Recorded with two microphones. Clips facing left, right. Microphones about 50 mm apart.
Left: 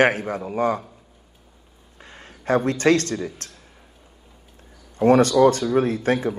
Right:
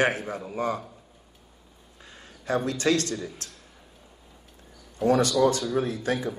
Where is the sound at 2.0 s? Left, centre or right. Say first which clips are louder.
Left 5 dB; left.